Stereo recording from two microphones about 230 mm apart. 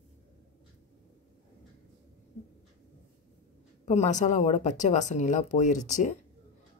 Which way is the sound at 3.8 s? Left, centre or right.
Left.